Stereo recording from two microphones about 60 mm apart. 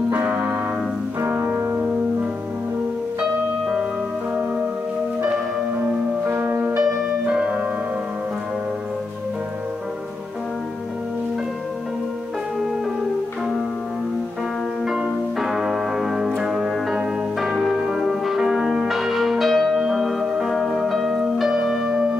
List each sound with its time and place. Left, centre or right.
0.1 s music: right
3.2 s music: centre
6.2 s music: right
6.7 s music: centre
14.9 s music: centre